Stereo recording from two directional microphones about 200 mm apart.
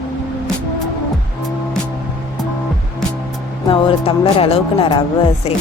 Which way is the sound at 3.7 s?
25° left (ahead or behind).